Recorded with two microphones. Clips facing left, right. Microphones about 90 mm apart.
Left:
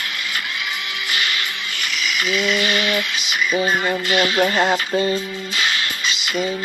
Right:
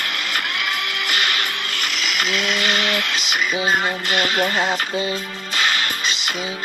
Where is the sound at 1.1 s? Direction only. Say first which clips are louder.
Right 1 dB; 55° right (ahead or behind).